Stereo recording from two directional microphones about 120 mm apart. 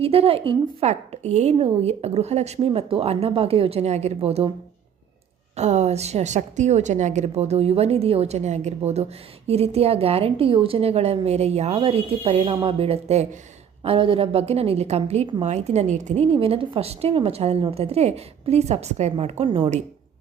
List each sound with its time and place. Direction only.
0.0 s a woman's voice: 55° right (ahead or behind)
5.5 s a woman's voice: 70° right (ahead or behind)
13.8 s a woman's voice: 50° right (ahead or behind)